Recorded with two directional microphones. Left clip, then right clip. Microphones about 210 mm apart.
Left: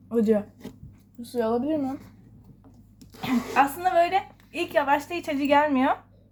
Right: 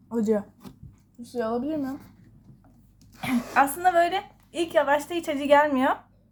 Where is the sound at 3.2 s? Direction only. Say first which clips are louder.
Even; 15° right (ahead or behind).